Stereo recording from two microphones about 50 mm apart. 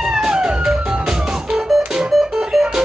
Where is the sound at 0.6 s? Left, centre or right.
Centre.